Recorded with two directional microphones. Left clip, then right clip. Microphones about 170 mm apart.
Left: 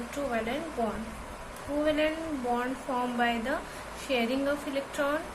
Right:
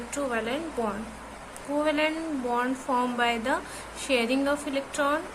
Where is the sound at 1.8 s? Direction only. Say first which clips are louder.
Right 1 dB; 35° right (ahead or behind).